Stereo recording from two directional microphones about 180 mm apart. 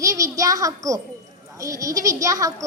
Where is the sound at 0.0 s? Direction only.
20° right (ahead or behind).